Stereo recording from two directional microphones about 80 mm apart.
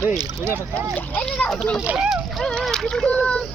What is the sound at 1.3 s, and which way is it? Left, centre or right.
Speech, centre.